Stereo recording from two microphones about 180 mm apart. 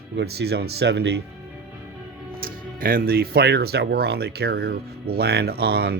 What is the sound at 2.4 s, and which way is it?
Speech, 55° right (ahead or behind).